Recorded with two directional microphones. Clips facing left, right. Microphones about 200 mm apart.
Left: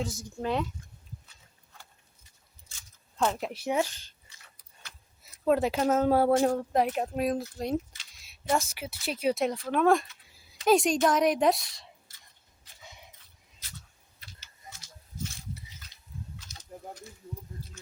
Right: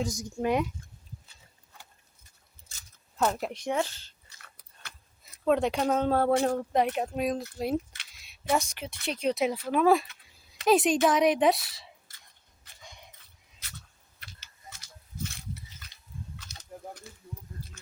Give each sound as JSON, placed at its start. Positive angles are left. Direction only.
{"t": 0.0, "sound": "speech", "side_deg": 5}
{"t": 0.3, "sound": "speech", "side_deg": -15}
{"t": 3.2, "sound": "speech", "side_deg": -5}
{"t": 3.5, "sound": "speech", "side_deg": 10}
{"t": 4.5, "sound": "a sound", "side_deg": -60}
{"t": 5.5, "sound": "speech", "side_deg": 5}
{"t": 12.8, "sound": "a sound", "side_deg": 5}
{"t": 14.2, "sound": "typing", "side_deg": -65}
{"t": 15.2, "sound": "a sound", "side_deg": -60}